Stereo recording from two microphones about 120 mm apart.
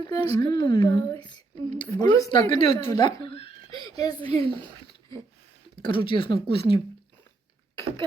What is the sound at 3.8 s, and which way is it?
Speech, 35° left (ahead or behind).